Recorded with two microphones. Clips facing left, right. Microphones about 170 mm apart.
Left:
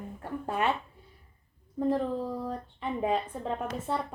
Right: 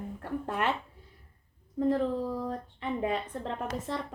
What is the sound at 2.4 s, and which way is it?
Speech, 70° right (ahead or behind).